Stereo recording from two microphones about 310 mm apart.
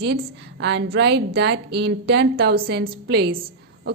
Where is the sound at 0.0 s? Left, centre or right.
Right.